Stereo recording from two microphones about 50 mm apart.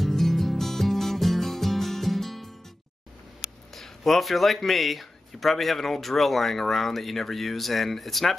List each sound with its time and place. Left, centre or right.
0.0 s music: centre
3.7 s speech: centre